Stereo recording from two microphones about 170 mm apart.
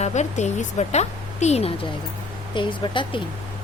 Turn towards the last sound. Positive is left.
turn(degrees=30)  # may be behind; listen again after turning